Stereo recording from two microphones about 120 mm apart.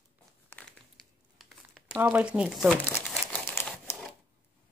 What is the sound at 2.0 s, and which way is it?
Speech, 10° right (ahead or behind).